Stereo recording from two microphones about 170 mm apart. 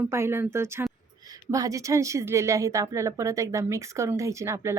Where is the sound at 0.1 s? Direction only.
15° right (ahead or behind).